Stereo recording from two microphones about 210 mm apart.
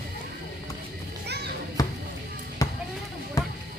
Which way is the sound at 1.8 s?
15° left (ahead or behind).